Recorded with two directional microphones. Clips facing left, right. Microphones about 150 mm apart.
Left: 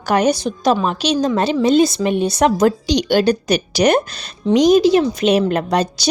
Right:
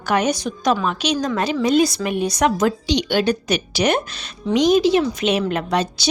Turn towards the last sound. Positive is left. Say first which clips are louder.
# left 3 dB
turn(degrees=40)  # may be behind; listen again after turning